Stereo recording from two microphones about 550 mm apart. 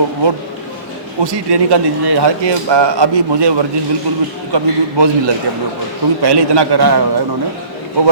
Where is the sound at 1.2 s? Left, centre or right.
Right.